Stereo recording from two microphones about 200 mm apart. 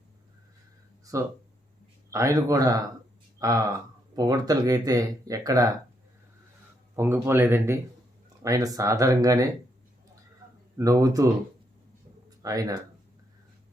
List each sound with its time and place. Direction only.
2.0 s speech: 15° right (ahead or behind)
6.9 s speech: 10° right (ahead or behind)
10.8 s speech: 15° right (ahead or behind)
12.4 s speech: 15° right (ahead or behind)